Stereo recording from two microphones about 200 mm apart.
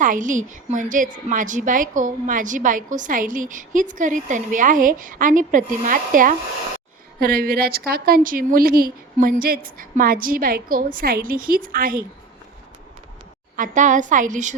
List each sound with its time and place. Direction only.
0.0 s a woman's voice: 40° right (ahead or behind)
13.6 s a woman's voice: 40° right (ahead or behind)